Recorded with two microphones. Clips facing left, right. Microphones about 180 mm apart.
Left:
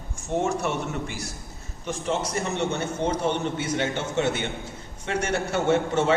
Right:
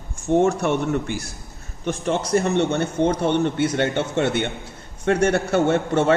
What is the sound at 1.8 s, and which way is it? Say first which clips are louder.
A man's voice: right 4 dB; 65° right (ahead or behind).